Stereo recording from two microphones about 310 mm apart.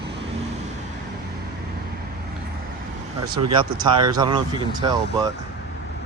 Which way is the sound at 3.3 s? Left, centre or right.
Centre.